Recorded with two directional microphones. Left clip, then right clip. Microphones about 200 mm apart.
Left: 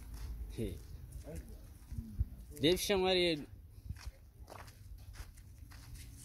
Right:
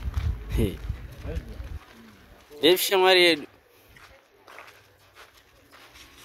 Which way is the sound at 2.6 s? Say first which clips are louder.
Right 12 dB; 15° right (ahead or behind).